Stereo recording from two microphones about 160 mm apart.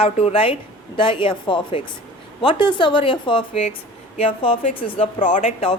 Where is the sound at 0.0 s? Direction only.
40° left (ahead or behind).